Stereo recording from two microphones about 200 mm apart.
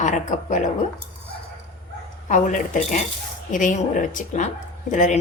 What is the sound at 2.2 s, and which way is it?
A woman's voice, 40° left (ahead or behind).